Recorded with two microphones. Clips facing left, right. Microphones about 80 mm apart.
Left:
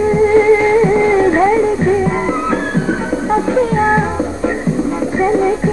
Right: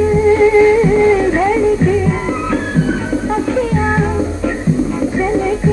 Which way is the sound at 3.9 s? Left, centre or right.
Centre.